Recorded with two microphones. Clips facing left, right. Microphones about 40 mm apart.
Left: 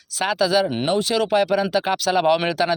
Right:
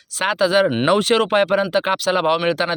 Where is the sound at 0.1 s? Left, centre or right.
Right.